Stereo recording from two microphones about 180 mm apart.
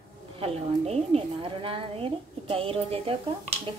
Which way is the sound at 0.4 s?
35° right (ahead or behind).